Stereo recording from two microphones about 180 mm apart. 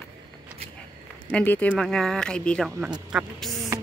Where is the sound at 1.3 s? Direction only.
5° left (ahead or behind).